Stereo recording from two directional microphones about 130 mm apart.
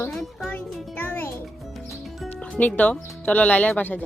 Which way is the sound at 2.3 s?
10° left (ahead or behind).